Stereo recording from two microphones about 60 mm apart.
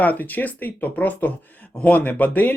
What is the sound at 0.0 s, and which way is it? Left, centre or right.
Speech, left.